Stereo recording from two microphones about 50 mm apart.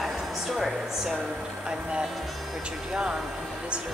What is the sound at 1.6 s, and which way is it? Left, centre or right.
Speech, centre.